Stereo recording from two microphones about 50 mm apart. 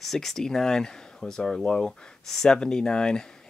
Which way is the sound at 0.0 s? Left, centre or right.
Centre.